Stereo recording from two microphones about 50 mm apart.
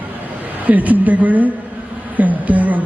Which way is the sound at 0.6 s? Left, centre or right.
Right.